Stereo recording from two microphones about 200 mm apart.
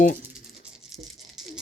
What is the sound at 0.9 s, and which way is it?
Patter, centre (ahead or behind).